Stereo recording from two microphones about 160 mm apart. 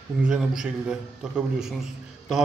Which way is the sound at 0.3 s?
5° right (ahead or behind).